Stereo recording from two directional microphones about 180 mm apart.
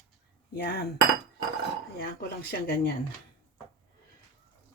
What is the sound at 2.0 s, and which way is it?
Speech, 60° left (ahead or behind).